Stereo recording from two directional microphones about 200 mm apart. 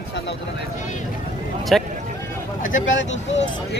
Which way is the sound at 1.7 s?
Centre (ahead or behind).